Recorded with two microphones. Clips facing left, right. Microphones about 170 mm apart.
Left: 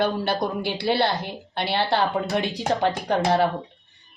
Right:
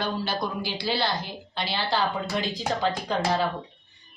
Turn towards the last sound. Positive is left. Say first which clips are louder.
# left 5 dB
turn(degrees=60)  # may be behind; listen again after turning